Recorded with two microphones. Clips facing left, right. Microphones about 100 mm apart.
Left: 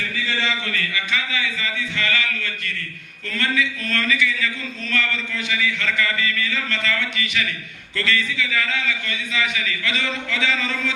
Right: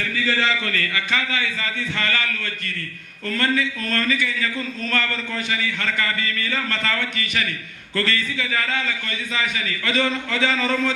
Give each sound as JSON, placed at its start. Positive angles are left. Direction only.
{"t": 0.3, "sound": "a man's voice", "side_deg": -45}